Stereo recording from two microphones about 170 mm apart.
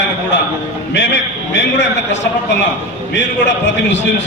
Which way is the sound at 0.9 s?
90° left.